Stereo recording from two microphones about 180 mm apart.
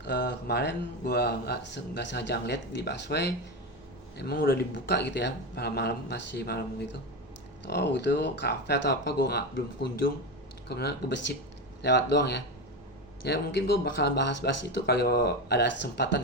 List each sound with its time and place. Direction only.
0.0 s speech: 70° left (ahead or behind)
4.2 s speech: 60° left (ahead or behind)
4.7 s speech: 70° left (ahead or behind)
7.7 s speech: 70° left (ahead or behind)
10.7 s speech: 65° left (ahead or behind)